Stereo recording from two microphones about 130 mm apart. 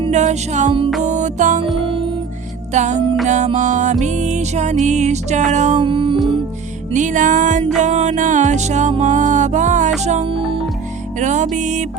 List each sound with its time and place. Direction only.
0.1 s music: 65° right (ahead or behind)
1.8 s music: 40° right (ahead or behind)
2.7 s music: 65° right (ahead or behind)
5.8 s music: 40° right (ahead or behind)
6.9 s music: 75° right (ahead or behind)
7.8 s music: 65° right (ahead or behind)
10.2 s music: 45° right (ahead or behind)
11.2 s music: 65° right (ahead or behind)